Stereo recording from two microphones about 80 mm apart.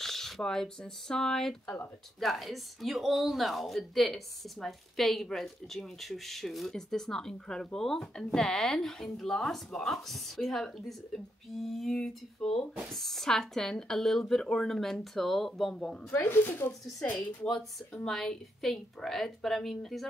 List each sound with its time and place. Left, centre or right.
0.0 s a woman's voice: centre
16.2 s speech: left
17.0 s a woman's voice: centre